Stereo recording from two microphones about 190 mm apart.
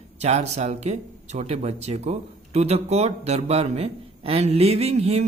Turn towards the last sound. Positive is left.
turn(degrees=-35)  # may be behind; listen again after turning